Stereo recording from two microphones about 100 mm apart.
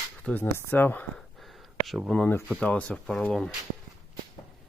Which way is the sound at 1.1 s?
Centre (ahead or behind).